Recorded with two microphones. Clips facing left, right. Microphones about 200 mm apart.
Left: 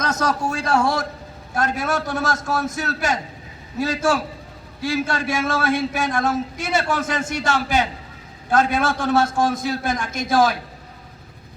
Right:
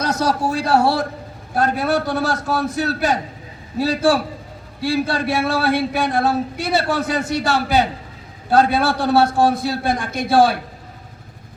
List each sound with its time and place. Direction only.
0.0 s a man's voice: 35° right (ahead or behind)